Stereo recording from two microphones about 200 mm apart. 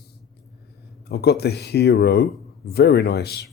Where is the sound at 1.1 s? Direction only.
55° left (ahead or behind).